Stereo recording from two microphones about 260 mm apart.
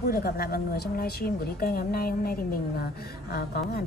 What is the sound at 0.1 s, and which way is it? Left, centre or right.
A woman's voice, left.